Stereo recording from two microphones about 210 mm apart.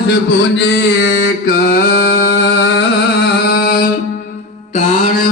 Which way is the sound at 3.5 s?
50° left (ahead or behind).